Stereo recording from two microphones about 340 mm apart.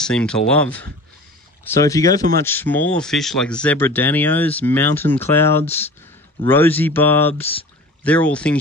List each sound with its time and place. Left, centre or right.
0.0 s speech: centre